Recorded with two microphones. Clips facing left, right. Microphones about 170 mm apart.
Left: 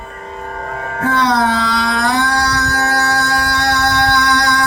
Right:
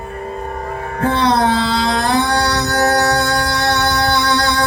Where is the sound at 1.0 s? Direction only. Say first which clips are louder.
Even; 30° right (ahead or behind).